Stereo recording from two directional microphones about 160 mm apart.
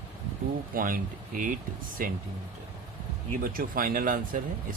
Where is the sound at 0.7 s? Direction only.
60° right (ahead or behind).